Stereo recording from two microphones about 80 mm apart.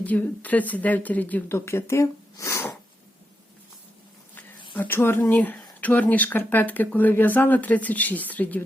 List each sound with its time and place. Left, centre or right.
0.0 s speech: centre
2.3 s snort: left
4.9 s speech: left